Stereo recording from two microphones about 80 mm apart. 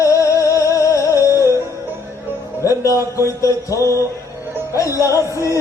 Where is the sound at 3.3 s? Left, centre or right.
Left.